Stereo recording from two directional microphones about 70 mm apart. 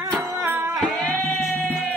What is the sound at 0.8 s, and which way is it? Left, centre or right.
Music, left.